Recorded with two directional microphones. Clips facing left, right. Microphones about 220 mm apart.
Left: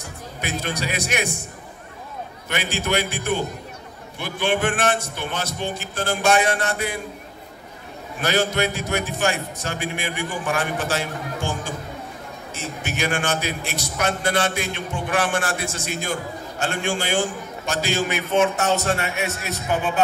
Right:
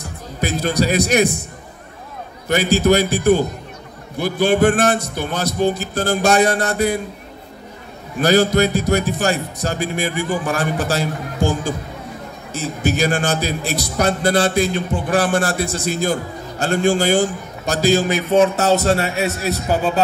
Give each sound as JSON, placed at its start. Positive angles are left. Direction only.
{"t": 0.0, "sound": "speech", "side_deg": -35}
{"t": 2.4, "sound": "a man's voice", "side_deg": -40}
{"t": 8.2, "sound": "a man's voice", "side_deg": -35}